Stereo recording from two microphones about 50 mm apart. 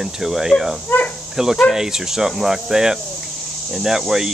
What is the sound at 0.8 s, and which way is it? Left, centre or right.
Speech, left.